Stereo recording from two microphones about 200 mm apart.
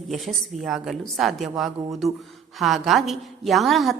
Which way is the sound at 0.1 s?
Centre (ahead or behind).